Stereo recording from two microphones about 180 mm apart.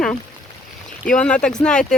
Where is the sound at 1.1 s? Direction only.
5° left (ahead or behind).